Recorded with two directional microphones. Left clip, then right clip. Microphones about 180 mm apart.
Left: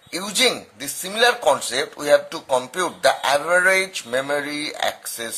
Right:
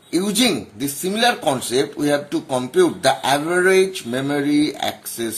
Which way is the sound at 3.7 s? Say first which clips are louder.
Right 3 dB; 45° left (ahead or behind).